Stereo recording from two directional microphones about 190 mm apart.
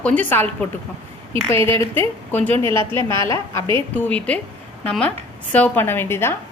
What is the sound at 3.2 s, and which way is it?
A woman's voice, 15° left (ahead or behind).